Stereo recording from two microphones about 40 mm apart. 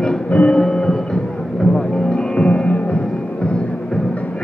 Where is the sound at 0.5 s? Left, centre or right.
Left.